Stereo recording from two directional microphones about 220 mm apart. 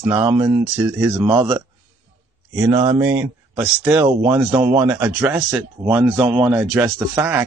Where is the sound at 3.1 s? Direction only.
10° right (ahead or behind).